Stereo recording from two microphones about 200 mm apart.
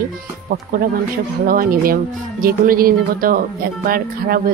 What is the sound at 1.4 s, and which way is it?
Speech, 45° right (ahead or behind).